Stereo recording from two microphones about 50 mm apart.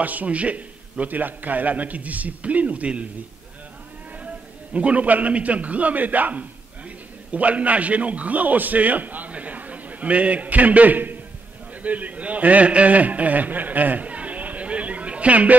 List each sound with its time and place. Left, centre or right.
0.0 s a man's voice: right
4.7 s a man's voice: right